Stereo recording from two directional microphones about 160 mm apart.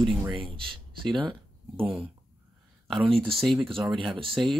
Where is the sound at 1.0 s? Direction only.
30° right (ahead or behind).